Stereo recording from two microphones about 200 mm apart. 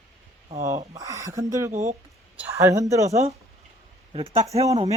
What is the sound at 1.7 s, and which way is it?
Speech, 35° right (ahead or behind).